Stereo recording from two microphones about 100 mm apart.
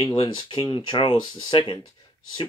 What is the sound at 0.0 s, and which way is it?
Speech, 60° left (ahead or behind).